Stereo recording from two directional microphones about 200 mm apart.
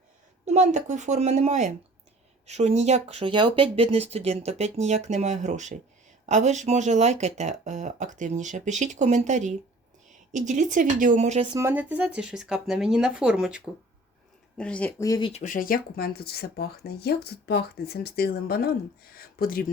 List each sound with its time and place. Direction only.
0.4 s a woman's voice: 35° right (ahead or behind)
11.5 s speech: 10° right (ahead or behind)
14.6 s speech: 5° left (ahead or behind)
15.3 s speech: 40° left (ahead or behind)